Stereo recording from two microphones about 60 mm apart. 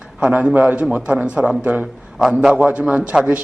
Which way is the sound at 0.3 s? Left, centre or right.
Right.